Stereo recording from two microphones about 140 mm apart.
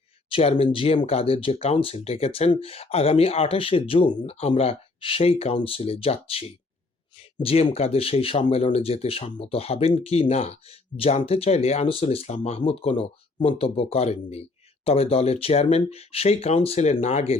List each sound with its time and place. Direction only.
0.3 s speech: 40° left (ahead or behind)